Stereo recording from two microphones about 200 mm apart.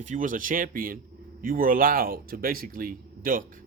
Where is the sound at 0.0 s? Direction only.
40° right (ahead or behind).